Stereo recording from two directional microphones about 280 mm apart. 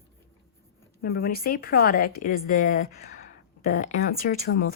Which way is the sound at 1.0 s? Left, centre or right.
Left.